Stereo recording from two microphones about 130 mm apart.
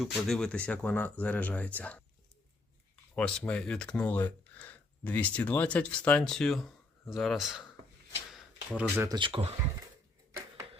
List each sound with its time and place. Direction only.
0.0 s speech: 5° left (ahead or behind)
8.3 s a sound: 10° right (ahead or behind)
9.0 s speech: 40° right (ahead or behind)